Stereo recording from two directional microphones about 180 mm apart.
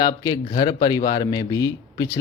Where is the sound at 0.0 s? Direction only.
25° left (ahead or behind).